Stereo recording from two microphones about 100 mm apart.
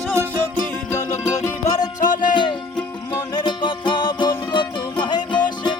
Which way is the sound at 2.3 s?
50° left (ahead or behind).